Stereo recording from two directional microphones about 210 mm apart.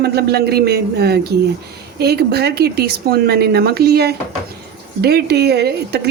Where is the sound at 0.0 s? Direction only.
50° right (ahead or behind).